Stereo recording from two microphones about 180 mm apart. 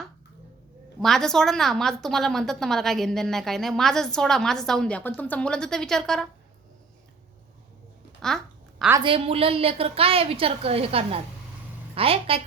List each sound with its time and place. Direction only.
1.0 s a woman's voice: centre (ahead or behind)
9.0 s a woman's voice: 30° right (ahead or behind)